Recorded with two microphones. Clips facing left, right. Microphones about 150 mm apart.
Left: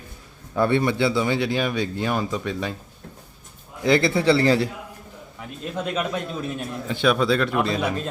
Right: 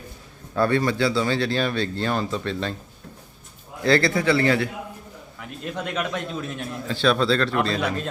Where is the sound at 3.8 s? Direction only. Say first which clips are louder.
Left 1 dB; 20° left (ahead or behind).